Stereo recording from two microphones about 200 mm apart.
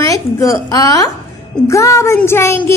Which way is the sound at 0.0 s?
15° left (ahead or behind).